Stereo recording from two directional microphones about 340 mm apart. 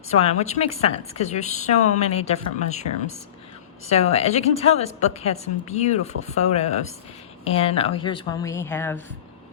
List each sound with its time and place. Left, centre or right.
0.1 s a woman's voice: centre